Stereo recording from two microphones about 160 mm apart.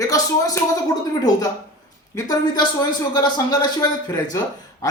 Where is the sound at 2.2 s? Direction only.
25° left (ahead or behind).